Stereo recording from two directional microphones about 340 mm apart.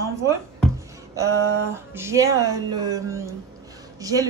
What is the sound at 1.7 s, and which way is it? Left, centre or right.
Speech, centre.